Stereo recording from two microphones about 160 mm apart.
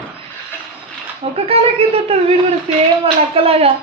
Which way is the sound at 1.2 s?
40° right (ahead or behind).